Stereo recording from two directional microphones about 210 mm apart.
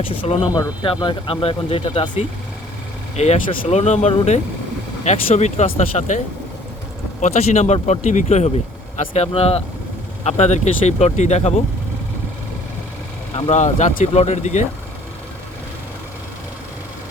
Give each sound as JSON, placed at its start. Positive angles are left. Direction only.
{"t": 0.1, "sound": "speech", "side_deg": 25}
{"t": 13.3, "sound": "speech", "side_deg": 35}